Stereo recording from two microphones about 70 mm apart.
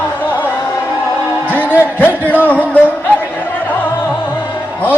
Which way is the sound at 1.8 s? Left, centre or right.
Left.